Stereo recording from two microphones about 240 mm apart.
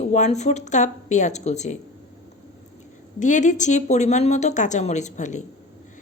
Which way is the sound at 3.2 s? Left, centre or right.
Left.